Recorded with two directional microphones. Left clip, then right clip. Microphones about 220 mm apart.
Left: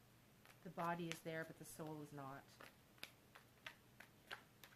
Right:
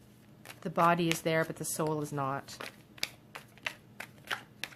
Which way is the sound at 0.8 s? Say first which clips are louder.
Right 19 dB; 35° right (ahead or behind).